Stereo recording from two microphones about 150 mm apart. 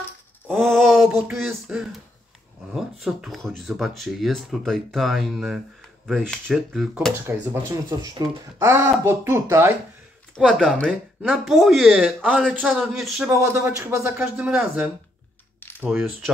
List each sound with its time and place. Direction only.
0.7 s a sound: centre (ahead or behind)
2.7 s speech: 5° right (ahead or behind)
7.2 s speech: 20° right (ahead or behind)
10.3 s speech: 5° left (ahead or behind)
13.3 s speech: 15° right (ahead or behind)